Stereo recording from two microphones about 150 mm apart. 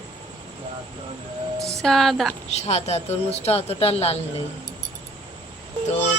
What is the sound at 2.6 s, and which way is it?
Speech, 45° left (ahead or behind).